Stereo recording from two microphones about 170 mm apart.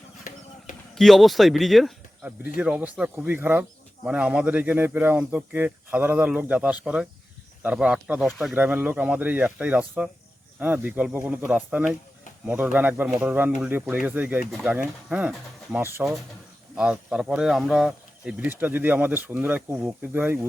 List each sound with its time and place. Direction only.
0.9 s speech: centre (ahead or behind)